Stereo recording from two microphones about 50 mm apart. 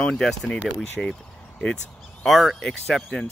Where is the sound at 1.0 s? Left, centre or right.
Centre.